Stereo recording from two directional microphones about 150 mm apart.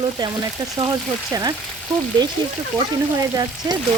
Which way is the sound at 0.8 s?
25° right (ahead or behind).